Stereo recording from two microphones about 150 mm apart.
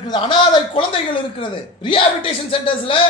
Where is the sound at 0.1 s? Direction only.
30° left (ahead or behind).